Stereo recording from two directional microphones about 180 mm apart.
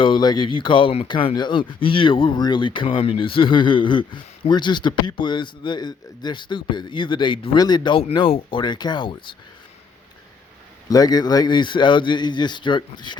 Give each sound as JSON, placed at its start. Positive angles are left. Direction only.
{"t": 0.0, "sound": "speech", "side_deg": 25}
{"t": 10.8, "sound": "speech", "side_deg": 20}